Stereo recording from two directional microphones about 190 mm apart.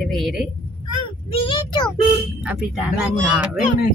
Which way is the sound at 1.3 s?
25° left (ahead or behind).